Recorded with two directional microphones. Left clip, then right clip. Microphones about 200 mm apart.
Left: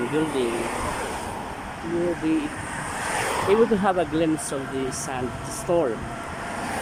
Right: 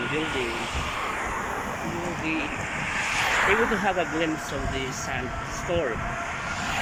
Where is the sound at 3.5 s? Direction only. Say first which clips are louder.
Left 3 dB; 20° left (ahead or behind).